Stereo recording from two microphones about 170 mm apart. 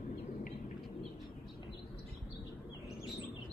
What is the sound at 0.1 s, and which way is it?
Bird, 55° left (ahead or behind).